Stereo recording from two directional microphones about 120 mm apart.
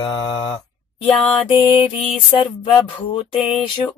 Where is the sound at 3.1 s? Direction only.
45° left (ahead or behind).